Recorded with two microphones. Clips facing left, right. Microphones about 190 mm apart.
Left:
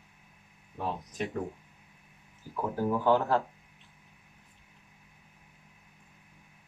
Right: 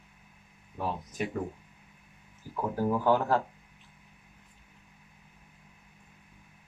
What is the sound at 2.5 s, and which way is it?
Speech, 15° left (ahead or behind).